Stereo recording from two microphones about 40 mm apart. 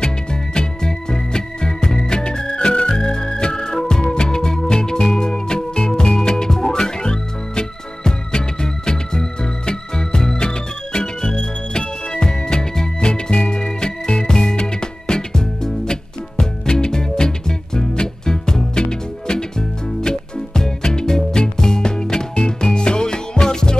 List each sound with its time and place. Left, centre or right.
0.0 s music: left
3.0 s organ: centre
3.5 s music: centre